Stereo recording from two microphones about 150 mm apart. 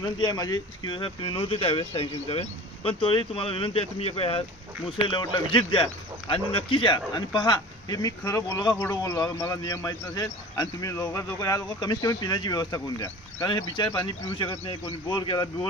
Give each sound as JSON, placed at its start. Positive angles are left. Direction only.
{"t": 0.0, "sound": "speech", "side_deg": 25}